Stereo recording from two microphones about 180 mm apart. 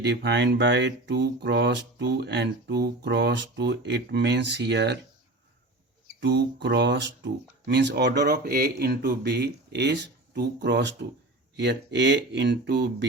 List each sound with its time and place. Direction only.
0.0 s speech: 70° right (ahead or behind)
6.1 s speech: 75° right (ahead or behind)